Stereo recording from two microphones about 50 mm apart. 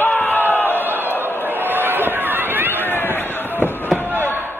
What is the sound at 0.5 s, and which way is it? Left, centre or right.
Crowd, left.